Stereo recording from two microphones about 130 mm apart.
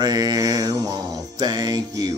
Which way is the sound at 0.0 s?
30° right (ahead or behind).